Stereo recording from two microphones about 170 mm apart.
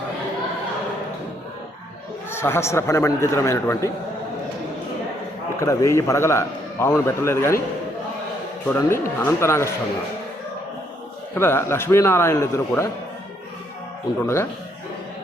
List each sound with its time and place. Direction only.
2.3 s a man's voice: 15° left (ahead or behind)
5.5 s a man's voice: 20° left (ahead or behind)
8.7 s a man's voice: 15° left (ahead or behind)
11.3 s a man's voice: 15° left (ahead or behind)